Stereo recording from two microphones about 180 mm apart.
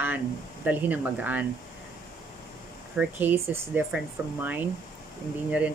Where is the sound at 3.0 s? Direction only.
10° right (ahead or behind).